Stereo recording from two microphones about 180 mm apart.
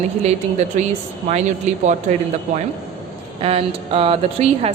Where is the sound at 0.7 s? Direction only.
40° right (ahead or behind).